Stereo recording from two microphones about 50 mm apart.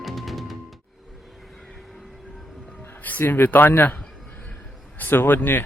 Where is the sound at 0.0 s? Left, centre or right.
Centre.